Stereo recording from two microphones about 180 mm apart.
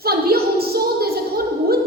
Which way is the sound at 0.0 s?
60° right (ahead or behind).